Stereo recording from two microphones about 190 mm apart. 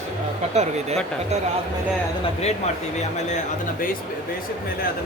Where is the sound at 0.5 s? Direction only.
35° right (ahead or behind).